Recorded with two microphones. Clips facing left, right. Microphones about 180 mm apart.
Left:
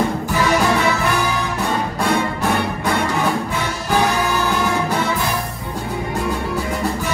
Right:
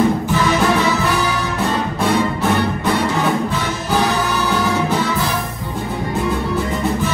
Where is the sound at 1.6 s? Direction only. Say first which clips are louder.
Right 3 dB; centre (ahead or behind).